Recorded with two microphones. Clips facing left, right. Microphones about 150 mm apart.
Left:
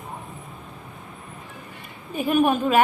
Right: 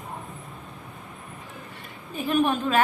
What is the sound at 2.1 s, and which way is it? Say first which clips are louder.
Speech: left 3 dB; 10° left (ahead or behind).